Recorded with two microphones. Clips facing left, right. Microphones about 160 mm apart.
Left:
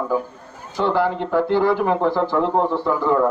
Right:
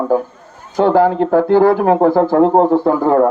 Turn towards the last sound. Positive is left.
turn(degrees=-50)  # may be behind; listen again after turning